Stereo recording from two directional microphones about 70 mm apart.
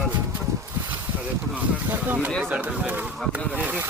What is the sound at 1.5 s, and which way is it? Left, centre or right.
Speech, right.